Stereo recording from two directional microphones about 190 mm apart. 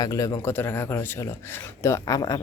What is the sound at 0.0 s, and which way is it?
Speech, 20° left (ahead or behind).